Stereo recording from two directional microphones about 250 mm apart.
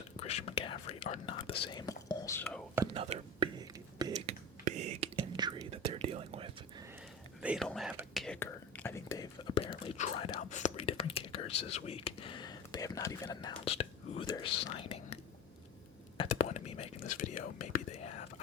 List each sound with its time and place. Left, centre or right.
0.2 s whispering: left; by 2.6 s centre
2.7 s whispering: centre
7.4 s whispering: centre; by 18.1 s left